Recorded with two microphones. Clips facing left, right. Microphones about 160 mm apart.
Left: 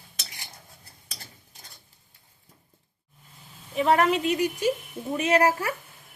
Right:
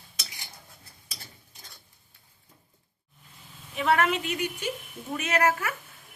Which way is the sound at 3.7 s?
35° left (ahead or behind).